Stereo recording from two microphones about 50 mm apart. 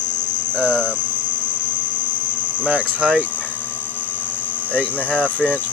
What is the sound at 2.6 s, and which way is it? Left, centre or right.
Speech, right.